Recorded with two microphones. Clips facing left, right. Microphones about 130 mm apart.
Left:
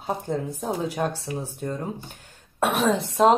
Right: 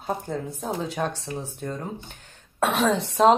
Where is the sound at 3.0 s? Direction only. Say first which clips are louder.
Right 1 dB; centre (ahead or behind).